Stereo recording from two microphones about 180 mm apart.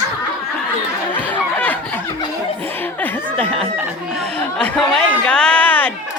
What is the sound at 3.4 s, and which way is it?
A man's voice, 5° left (ahead or behind).